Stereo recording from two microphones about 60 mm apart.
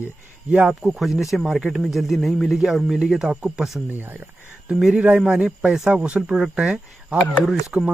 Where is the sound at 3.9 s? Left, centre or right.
Right.